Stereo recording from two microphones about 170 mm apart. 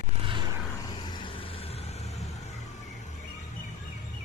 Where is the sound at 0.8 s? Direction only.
25° left (ahead or behind).